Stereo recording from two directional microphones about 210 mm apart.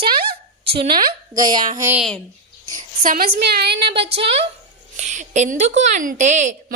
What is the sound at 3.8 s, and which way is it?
A woman's voice, 25° right (ahead or behind).